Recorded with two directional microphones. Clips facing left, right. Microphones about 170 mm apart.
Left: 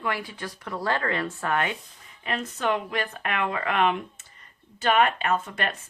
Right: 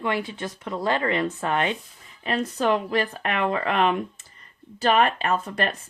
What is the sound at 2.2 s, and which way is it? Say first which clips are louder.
Speech: right 4 dB; 35° right (ahead or behind).